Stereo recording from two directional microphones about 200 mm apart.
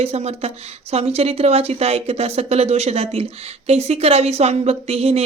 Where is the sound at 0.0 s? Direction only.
30° right (ahead or behind).